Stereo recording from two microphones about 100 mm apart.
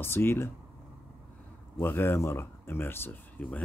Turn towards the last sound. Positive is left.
turn(degrees=20)  # may be behind; listen again after turning